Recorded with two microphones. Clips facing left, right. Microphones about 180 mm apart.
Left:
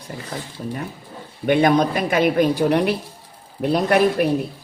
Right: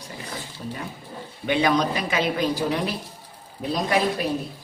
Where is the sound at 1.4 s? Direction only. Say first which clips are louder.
Left 5 dB; 50° left (ahead or behind).